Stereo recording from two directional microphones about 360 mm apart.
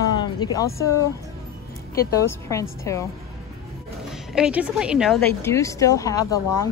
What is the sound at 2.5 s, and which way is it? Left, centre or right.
Speech, centre.